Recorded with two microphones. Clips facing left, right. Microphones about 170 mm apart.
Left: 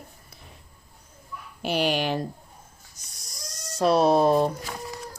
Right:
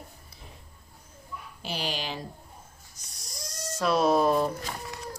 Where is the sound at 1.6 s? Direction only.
60° left (ahead or behind).